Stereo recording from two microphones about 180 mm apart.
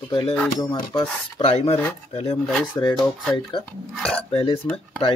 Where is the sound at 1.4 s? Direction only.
35° left (ahead or behind).